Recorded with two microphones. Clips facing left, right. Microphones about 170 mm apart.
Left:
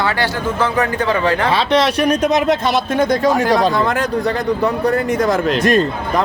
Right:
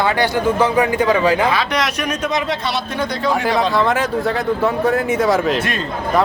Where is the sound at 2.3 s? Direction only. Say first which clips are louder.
Left 6 dB; 45° left (ahead or behind).